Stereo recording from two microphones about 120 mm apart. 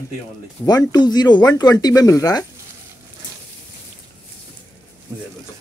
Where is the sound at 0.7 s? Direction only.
35° left (ahead or behind).